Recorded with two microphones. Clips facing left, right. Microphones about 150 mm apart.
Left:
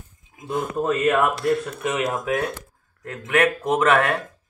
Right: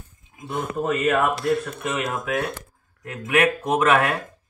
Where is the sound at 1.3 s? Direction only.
Centre (ahead or behind).